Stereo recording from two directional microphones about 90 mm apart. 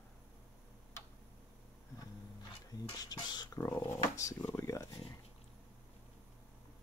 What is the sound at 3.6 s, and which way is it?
Speech, 30° left (ahead or behind).